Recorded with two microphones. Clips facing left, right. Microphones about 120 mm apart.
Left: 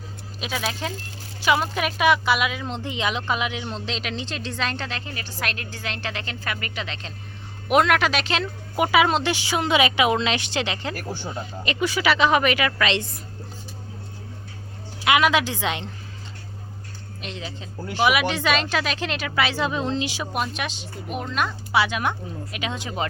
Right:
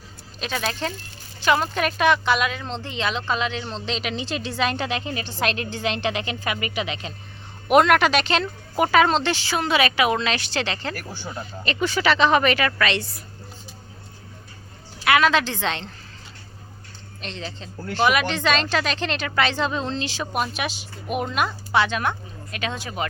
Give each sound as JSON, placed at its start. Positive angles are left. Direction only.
{"t": 0.3, "sound": "a woman's voice", "side_deg": 5}
{"t": 7.7, "sound": "a woman's voice", "side_deg": 0}
{"t": 15.0, "sound": "a woman's voice", "side_deg": 15}
{"t": 17.2, "sound": "a woman's voice", "side_deg": 10}
{"t": 20.3, "sound": "speech", "side_deg": -5}
{"t": 21.7, "sound": "a woman's voice", "side_deg": 10}